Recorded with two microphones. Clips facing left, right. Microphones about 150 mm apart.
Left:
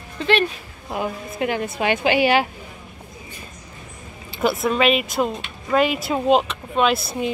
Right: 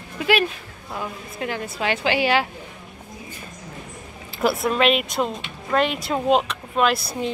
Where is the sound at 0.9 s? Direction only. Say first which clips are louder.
Left 5 dB; 20° left (ahead or behind).